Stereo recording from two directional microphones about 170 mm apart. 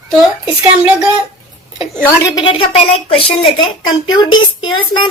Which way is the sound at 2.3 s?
30° left (ahead or behind).